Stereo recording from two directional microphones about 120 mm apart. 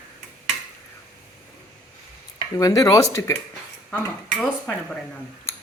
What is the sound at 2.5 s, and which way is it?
Speech, 30° left (ahead or behind).